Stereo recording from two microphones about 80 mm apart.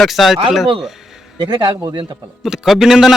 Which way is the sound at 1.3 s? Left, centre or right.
Right.